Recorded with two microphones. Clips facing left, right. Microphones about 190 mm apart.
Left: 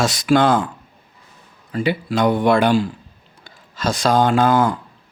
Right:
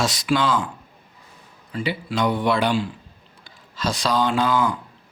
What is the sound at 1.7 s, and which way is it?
A man's voice, 50° left (ahead or behind).